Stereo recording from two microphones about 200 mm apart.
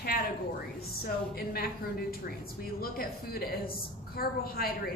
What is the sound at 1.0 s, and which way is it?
A man's voice, 50° left (ahead or behind).